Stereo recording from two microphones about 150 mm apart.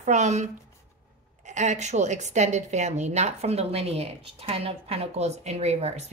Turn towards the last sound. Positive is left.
turn(degrees=-45)  # may be behind; listen again after turning